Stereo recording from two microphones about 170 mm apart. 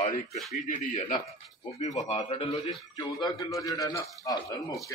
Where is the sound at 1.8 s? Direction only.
40° left (ahead or behind).